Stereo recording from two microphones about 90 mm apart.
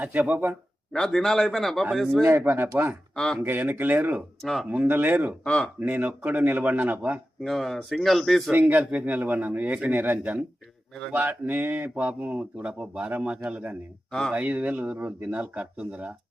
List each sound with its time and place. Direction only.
0.0 s speech: 20° right (ahead or behind)
0.9 s a man's voice: 5° left (ahead or behind)
2.2 s speech: 20° right (ahead or behind)
3.2 s speech: 10° left (ahead or behind)
3.4 s speech: 20° right (ahead or behind)
5.5 s speech: 10° left (ahead or behind)
5.8 s speech: 20° right (ahead or behind)
7.4 s a man's voice: centre (ahead or behind)
8.5 s speech: 15° right (ahead or behind)
14.1 s a man's voice: 5° left (ahead or behind)
14.3 s speech: 15° right (ahead or behind)